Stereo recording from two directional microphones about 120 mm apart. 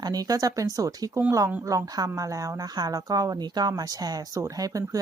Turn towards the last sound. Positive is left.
turn(degrees=-30)  # may be behind; listen again after turning